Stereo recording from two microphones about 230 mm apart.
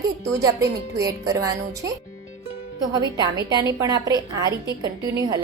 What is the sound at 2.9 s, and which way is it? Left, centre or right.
A woman's voice, centre.